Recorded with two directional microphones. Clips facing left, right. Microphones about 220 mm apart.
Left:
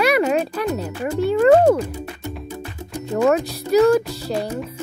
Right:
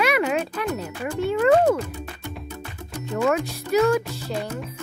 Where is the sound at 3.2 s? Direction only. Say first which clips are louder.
Left 5 dB; 40° left (ahead or behind).